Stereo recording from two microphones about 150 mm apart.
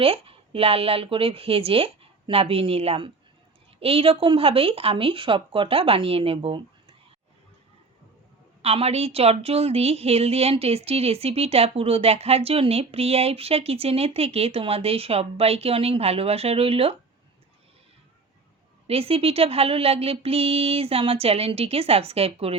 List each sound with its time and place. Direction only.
0.0 s a woman's voice: 40° right (ahead or behind)
8.6 s a woman's voice: 45° right (ahead or behind)
18.9 s a woman's voice: 40° right (ahead or behind)